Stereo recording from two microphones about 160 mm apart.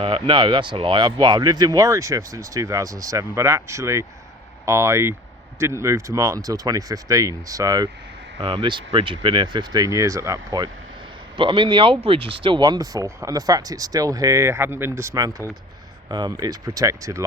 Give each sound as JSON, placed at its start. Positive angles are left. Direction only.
{"t": 0.0, "sound": "speech", "side_deg": -30}